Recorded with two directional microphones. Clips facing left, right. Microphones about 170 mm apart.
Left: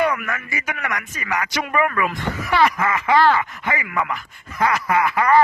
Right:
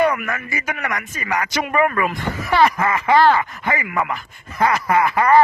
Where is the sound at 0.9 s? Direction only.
30° right (ahead or behind).